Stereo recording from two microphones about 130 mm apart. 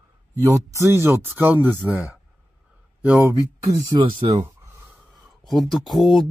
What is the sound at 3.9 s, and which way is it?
Speech, 35° right (ahead or behind).